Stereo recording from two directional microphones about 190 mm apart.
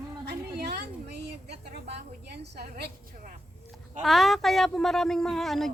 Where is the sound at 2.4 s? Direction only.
60° right (ahead or behind).